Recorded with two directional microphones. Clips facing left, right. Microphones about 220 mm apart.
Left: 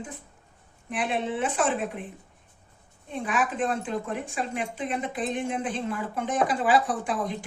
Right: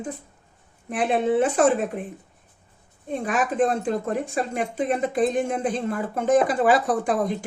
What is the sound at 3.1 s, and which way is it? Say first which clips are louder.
A woman's voice: right 4 dB; 45° right (ahead or behind).